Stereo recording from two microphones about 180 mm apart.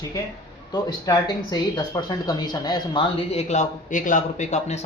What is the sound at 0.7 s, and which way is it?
Speech, 20° left (ahead or behind).